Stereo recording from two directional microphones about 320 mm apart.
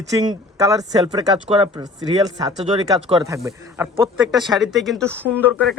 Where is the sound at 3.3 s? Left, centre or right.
Centre.